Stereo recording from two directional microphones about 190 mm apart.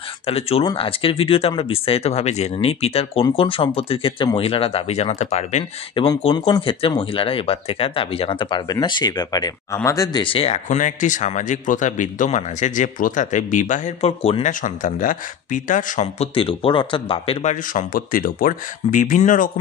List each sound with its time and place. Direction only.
0.3 s speech: 30° left (ahead or behind)